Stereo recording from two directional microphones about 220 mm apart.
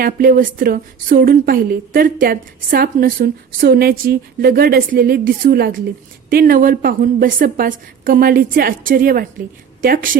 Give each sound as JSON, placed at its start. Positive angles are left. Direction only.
{"t": 0.0, "sound": "a woman's voice", "side_deg": -40}